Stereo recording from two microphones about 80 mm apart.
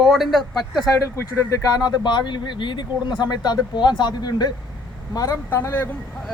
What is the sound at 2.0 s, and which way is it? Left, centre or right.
Speech, left.